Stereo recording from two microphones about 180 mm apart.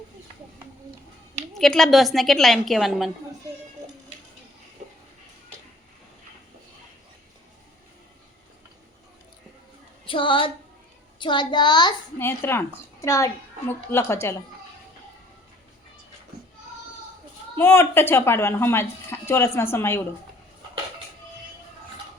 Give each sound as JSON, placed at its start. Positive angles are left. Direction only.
{"t": 1.5, "sound": "a woman's voice", "side_deg": 0}
{"t": 10.1, "sound": "a child's voice", "side_deg": 30}
{"t": 12.2, "sound": "speech", "side_deg": 15}
{"t": 17.6, "sound": "speech", "side_deg": 15}